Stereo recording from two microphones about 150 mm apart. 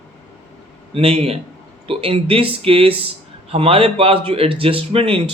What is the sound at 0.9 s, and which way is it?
A man's voice, 40° right (ahead or behind).